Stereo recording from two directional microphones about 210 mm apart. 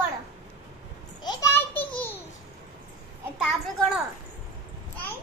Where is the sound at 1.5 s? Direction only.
10° left (ahead or behind).